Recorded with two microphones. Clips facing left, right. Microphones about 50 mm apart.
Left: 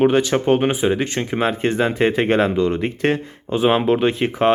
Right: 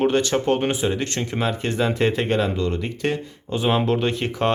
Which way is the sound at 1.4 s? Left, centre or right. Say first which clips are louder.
Left 4 dB; left.